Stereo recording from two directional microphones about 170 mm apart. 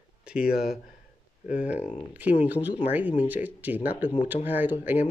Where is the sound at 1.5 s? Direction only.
10° right (ahead or behind).